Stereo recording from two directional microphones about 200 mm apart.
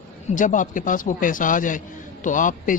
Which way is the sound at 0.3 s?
40° left (ahead or behind).